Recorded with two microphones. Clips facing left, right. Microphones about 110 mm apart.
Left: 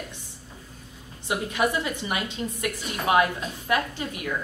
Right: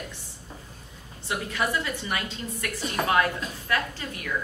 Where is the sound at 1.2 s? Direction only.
20° left (ahead or behind).